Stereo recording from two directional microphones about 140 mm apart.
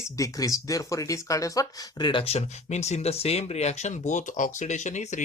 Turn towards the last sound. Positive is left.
turn(degrees=60)  # may be behind; listen again after turning